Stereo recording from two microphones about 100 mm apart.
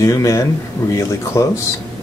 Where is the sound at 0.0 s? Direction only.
30° left (ahead or behind).